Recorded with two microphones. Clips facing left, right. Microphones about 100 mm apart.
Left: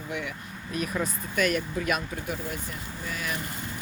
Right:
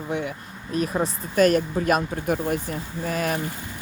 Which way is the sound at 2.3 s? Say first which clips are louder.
Right 9 dB; 50° right (ahead or behind).